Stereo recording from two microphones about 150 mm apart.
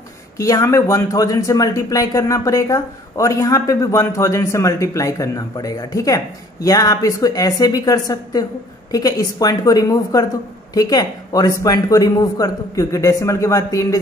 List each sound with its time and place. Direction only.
0.4 s speech: 20° left (ahead or behind)